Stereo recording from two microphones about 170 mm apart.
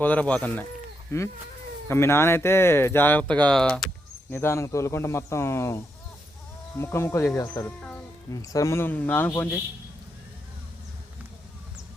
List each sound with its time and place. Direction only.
0.0 s speech: 10° left (ahead or behind)
4.3 s speech: 15° left (ahead or behind)